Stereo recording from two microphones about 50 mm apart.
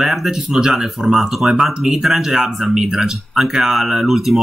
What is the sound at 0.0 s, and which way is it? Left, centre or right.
Speech, centre.